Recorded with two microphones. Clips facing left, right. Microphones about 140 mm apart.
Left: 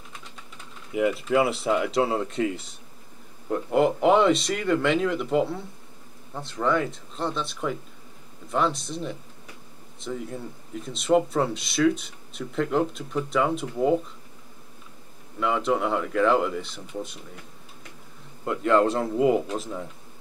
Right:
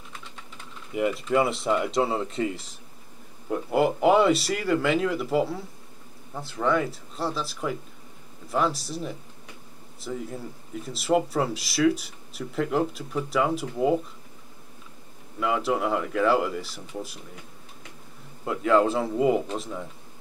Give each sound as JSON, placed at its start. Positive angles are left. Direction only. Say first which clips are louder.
{"t": 0.9, "sound": "speech", "louder": "left 1 dB", "side_deg": 0}
{"t": 3.5, "sound": "speech", "louder": "left 1 dB", "side_deg": -5}
{"t": 15.3, "sound": "speech", "louder": "left 1 dB", "side_deg": -5}
{"t": 18.4, "sound": "speech", "louder": "even", "side_deg": -5}